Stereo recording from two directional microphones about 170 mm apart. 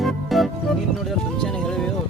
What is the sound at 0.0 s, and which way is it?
Music, centre (ahead or behind).